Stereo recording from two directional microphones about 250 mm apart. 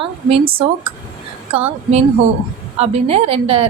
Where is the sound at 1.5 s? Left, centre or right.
Right.